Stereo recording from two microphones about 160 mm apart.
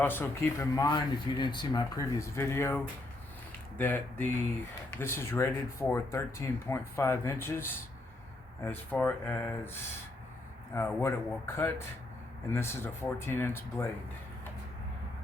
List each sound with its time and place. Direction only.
0.0 s speech: 15° left (ahead or behind)